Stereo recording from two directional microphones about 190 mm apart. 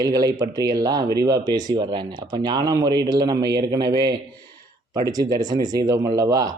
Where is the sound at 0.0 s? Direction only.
20° right (ahead or behind).